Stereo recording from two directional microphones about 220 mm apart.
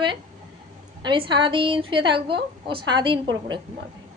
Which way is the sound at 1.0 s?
20° right (ahead or behind).